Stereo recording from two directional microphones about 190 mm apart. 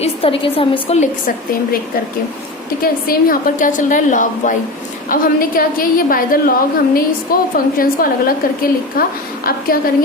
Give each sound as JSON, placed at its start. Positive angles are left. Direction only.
{"t": 0.0, "sound": "a woman's voice", "side_deg": 30}
{"t": 2.8, "sound": "a woman's voice", "side_deg": 50}